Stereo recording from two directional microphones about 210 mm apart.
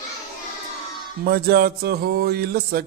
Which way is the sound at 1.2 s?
45° right (ahead or behind).